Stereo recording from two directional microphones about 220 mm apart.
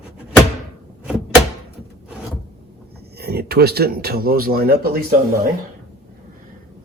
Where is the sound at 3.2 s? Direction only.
45° right (ahead or behind).